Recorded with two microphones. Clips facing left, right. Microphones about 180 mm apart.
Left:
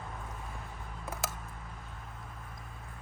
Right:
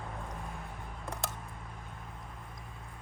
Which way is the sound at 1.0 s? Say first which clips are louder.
Left 1 dB; 5° left (ahead or behind).